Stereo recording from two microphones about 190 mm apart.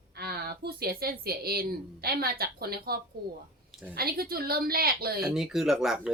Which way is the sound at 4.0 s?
50° right (ahead or behind).